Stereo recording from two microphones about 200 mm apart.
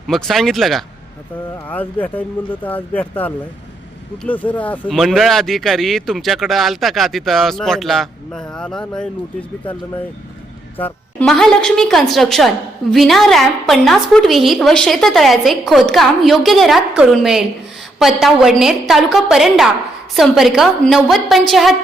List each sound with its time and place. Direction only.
0.1 s speech: centre (ahead or behind)
10.8 s speech: 10° left (ahead or behind)